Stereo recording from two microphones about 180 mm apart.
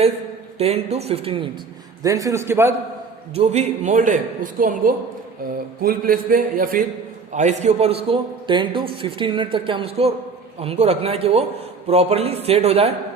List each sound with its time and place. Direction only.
0.6 s a man's voice: 35° right (ahead or behind)
2.0 s a man's voice: 20° right (ahead or behind)
3.3 s a man's voice: 35° right (ahead or behind)
7.3 s a man's voice: 40° right (ahead or behind)